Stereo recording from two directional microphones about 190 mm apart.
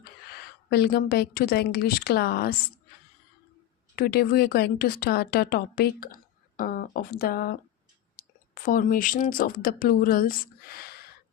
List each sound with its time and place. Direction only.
0.7 s a woman's voice: 55° left (ahead or behind)
3.9 s speech: 55° left (ahead or behind)